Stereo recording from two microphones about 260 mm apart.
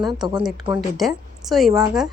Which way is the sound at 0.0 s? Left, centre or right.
Centre.